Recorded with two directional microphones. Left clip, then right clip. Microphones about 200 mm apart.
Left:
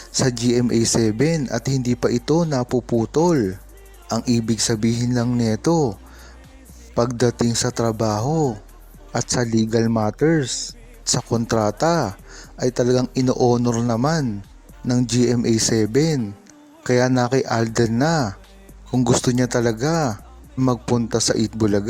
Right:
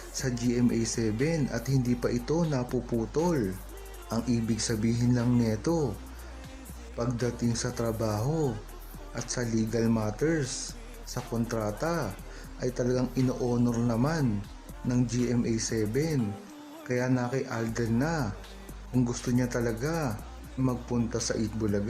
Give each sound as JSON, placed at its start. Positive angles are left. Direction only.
{"t": 0.1, "sound": "speech", "side_deg": 40}
{"t": 6.9, "sound": "speech", "side_deg": 45}